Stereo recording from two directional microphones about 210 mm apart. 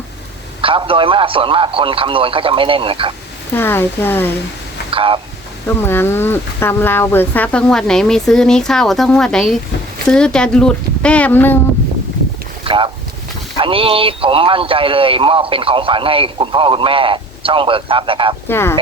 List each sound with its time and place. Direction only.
0.6 s speech: 25° right (ahead or behind)
3.5 s speech: 10° left (ahead or behind)
4.9 s a sound: 25° right (ahead or behind)
5.6 s speech: 10° left (ahead or behind)
12.6 s speech: 25° right (ahead or behind)
18.4 s speech: 10° left (ahead or behind)